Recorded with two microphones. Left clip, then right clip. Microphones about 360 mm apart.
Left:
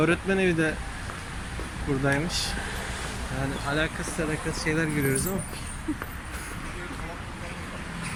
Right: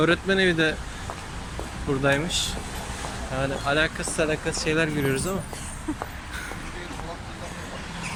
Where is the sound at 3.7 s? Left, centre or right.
Centre.